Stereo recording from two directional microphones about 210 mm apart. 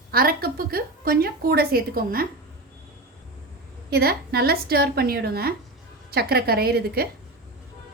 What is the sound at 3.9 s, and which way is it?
A woman's voice, 50° right (ahead or behind).